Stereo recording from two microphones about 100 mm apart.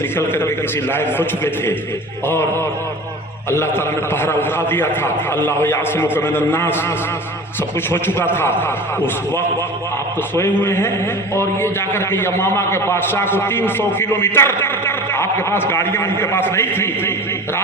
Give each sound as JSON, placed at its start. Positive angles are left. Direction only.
{"t": 0.2, "sound": "a man's voice", "side_deg": 25}
{"t": 3.5, "sound": "a man's voice", "side_deg": 25}
{"t": 7.9, "sound": "a man's voice", "side_deg": 20}
{"t": 10.6, "sound": "a man's voice", "side_deg": 25}